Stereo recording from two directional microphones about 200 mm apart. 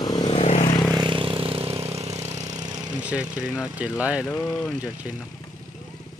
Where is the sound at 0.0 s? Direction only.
20° left (ahead or behind).